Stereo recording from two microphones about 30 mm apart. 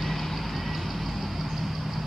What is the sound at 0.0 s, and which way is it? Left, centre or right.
Vehicle, centre.